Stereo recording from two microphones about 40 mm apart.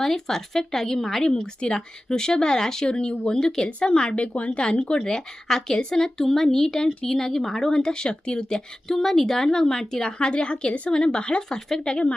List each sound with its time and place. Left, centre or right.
0.0 s a woman's voice: centre
4.2 s speech: left
5.0 s a woman's voice: centre